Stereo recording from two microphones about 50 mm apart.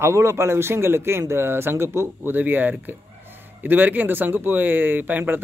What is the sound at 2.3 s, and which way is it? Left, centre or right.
A man's voice, right.